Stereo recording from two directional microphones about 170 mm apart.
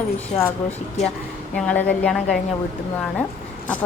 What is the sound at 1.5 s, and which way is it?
Speech, 10° left (ahead or behind).